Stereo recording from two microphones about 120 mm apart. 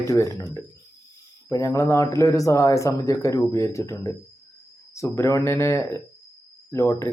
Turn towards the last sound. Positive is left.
turn(degrees=25)  # may be behind; listen again after turning